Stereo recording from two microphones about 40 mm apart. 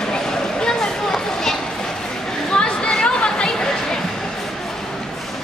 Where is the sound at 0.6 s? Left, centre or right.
Centre.